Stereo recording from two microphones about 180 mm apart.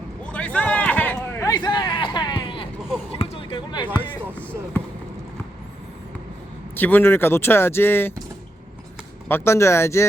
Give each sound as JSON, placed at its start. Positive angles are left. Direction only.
{"t": 0.3, "sound": "a sound", "side_deg": 5}
{"t": 6.7, "sound": "speech", "side_deg": 10}
{"t": 9.3, "sound": "speech", "side_deg": 15}